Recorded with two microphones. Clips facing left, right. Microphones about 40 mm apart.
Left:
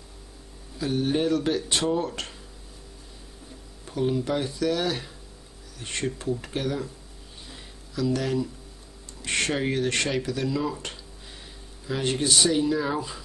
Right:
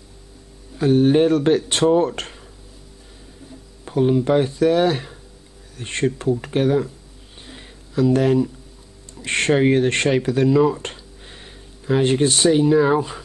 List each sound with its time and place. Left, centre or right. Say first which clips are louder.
0.7 s speech: right 10 dB; right
3.8 s speech: right 8 dB; right
7.4 s a sound: right 6 dB; right
9.2 s speech: right 9 dB; right